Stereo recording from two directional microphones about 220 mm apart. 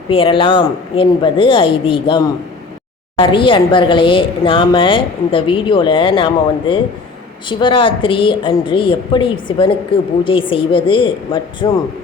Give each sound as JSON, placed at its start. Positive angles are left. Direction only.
{"t": 0.1, "sound": "a woman's voice", "side_deg": 25}